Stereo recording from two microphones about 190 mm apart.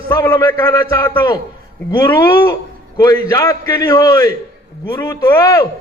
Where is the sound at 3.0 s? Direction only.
20° left (ahead or behind).